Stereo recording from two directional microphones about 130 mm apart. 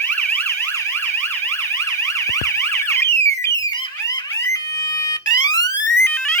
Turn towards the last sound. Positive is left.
turn(degrees=20)  # may be behind; listen again after turning